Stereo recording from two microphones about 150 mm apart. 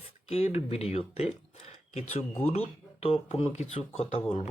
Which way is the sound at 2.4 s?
40° left (ahead or behind).